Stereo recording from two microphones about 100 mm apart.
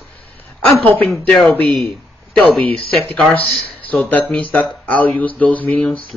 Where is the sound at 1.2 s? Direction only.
5° left (ahead or behind).